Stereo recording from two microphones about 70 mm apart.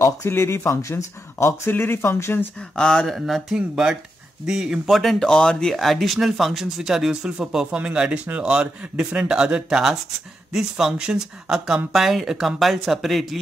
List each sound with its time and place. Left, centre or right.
0.0 s speech: left
1.7 s speech: left
2.7 s speech: centre
3.2 s speech: centre